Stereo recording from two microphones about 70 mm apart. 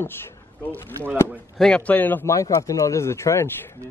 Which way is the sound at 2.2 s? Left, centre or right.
Left.